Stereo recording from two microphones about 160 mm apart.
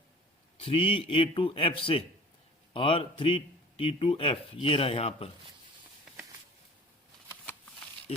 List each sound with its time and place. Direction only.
0.6 s speech: 35° left (ahead or behind)